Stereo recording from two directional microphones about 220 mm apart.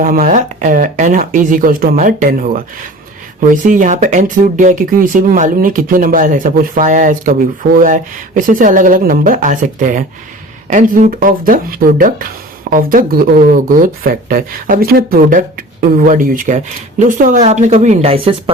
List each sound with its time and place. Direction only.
0.0 s speech: 40° right (ahead or behind)